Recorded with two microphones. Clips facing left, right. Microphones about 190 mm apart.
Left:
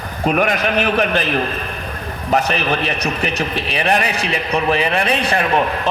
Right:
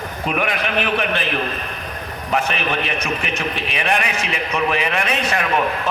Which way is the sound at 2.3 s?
35° left (ahead or behind).